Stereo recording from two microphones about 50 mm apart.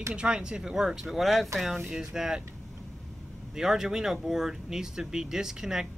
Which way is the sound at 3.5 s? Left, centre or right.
Centre.